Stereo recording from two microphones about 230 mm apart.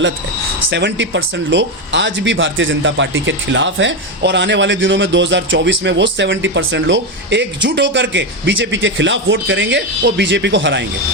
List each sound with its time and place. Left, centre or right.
0.7 s speech: right